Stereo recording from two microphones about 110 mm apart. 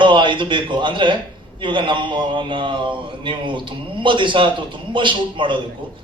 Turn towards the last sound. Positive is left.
turn(degrees=-45)  # may be behind; listen again after turning